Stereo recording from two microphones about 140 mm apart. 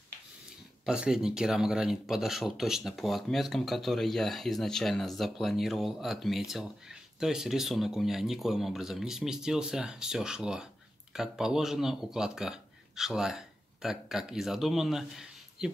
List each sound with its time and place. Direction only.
0.8 s speech: 5° right (ahead or behind)